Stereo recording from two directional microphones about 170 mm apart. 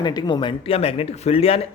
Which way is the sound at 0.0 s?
25° left (ahead or behind).